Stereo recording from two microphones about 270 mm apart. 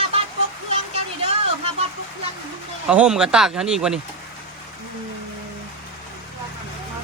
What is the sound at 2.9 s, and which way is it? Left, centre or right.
Speech, centre.